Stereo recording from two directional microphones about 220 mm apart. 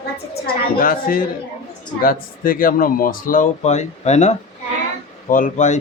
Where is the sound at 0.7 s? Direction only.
40° left (ahead or behind).